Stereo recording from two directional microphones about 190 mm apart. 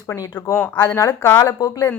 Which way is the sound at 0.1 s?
15° left (ahead or behind).